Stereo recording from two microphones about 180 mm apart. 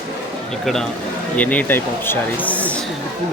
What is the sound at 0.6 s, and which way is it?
Speech, 5° left (ahead or behind).